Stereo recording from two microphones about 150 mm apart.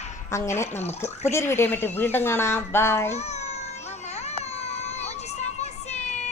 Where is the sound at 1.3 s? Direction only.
15° left (ahead or behind).